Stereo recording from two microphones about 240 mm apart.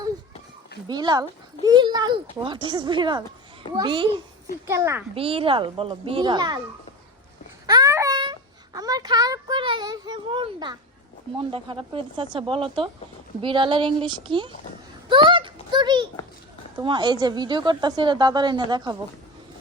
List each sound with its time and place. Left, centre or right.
0.9 s a woman's voice: centre
5.1 s speech: right
7.7 s a sound: centre
11.3 s speech: right
15.1 s a sound: right
16.8 s a woman's voice: centre